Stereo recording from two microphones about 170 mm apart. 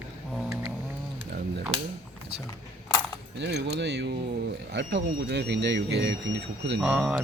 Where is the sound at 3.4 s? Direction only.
85° right.